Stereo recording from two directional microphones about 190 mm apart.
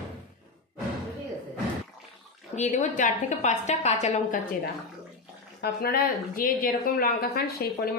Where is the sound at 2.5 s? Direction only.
40° left (ahead or behind).